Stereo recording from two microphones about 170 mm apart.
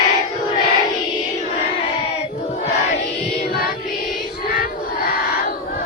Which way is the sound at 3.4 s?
65° left (ahead or behind).